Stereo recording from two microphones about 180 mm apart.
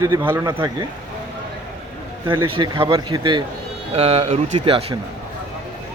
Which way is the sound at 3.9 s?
35° right (ahead or behind).